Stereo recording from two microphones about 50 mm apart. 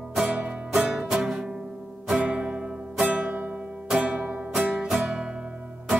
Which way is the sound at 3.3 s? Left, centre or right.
Right.